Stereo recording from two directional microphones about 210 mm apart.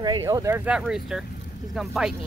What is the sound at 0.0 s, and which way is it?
Speech, 20° right (ahead or behind).